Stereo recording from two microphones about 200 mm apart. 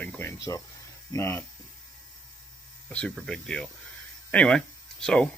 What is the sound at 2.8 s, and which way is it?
Speech, 5° left (ahead or behind).